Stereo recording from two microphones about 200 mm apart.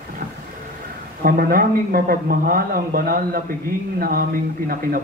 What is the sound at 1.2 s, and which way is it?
A man's voice, 45° right (ahead or behind).